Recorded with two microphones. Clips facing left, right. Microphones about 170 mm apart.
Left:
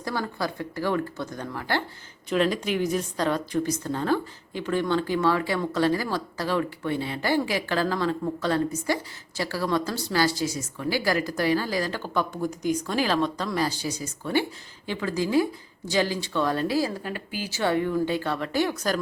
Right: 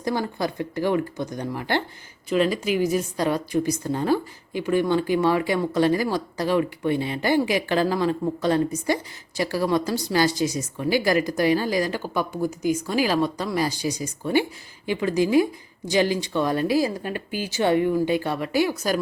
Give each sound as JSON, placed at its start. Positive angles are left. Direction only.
{"t": 0.0, "sound": "a woman's voice", "side_deg": -20}
{"t": 2.3, "sound": "a woman's voice", "side_deg": -5}